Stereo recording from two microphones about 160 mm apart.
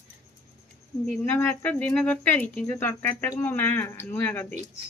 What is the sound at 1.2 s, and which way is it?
Speech, 15° left (ahead or behind).